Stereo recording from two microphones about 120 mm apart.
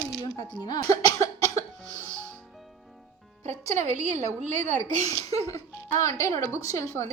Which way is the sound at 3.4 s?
75° right (ahead or behind).